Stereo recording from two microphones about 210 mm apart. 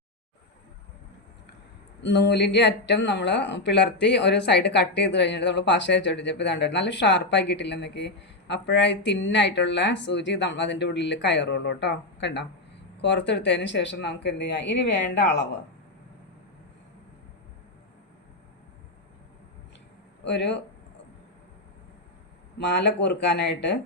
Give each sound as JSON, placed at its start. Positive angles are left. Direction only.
{"t": 2.0, "sound": "speech", "side_deg": 55}
{"t": 20.2, "sound": "speech", "side_deg": 55}
{"t": 22.5, "sound": "speech", "side_deg": 55}